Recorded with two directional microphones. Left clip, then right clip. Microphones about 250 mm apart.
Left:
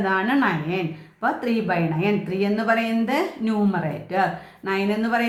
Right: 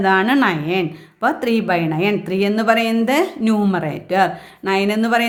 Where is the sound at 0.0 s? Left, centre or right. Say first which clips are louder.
Right 6 dB; right.